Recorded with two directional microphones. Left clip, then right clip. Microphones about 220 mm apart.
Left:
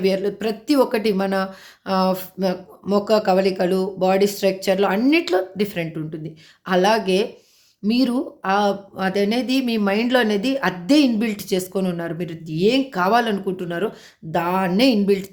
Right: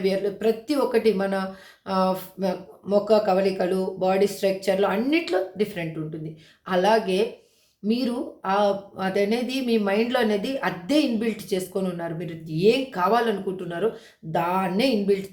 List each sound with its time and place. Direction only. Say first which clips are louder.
0.0 s speech: left 2 dB; 45° left (ahead or behind)